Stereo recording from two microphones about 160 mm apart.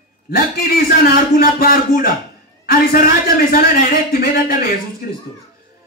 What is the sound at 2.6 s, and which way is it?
A man's voice, 65° left (ahead or behind).